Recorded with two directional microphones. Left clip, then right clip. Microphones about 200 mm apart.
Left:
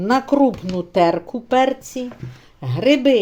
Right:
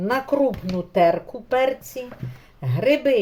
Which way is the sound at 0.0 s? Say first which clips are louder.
Left 4 dB; 40° left (ahead or behind).